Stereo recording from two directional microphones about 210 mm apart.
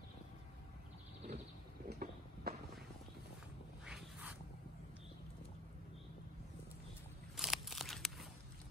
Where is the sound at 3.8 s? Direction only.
5° right (ahead or behind).